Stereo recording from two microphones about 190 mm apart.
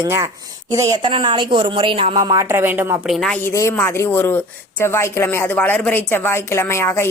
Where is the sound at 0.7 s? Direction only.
20° right (ahead or behind).